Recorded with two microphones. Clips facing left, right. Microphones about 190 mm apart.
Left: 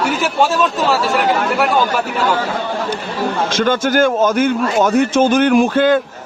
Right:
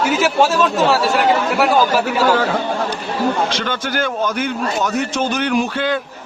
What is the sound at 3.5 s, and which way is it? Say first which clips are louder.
A man's voice: left 7 dB; 45° left (ahead or behind).